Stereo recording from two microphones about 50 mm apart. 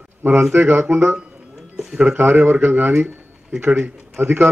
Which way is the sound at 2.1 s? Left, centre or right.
Right.